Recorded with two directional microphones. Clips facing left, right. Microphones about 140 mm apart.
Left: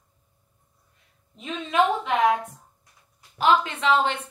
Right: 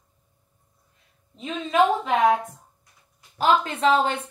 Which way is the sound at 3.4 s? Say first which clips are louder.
Right 1 dB; 40° right (ahead or behind).